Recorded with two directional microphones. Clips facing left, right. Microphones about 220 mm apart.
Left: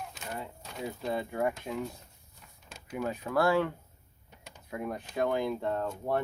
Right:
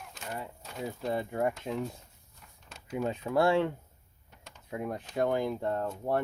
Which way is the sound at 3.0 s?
25° right (ahead or behind).